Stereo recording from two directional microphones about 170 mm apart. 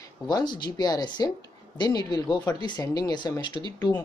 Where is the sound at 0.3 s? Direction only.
25° left (ahead or behind).